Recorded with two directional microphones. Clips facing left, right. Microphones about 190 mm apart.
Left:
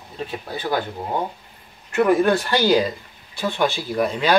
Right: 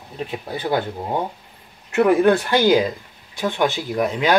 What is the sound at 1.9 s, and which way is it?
Speech, 20° right (ahead or behind).